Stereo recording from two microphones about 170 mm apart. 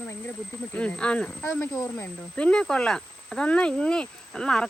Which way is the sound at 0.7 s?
5° left (ahead or behind).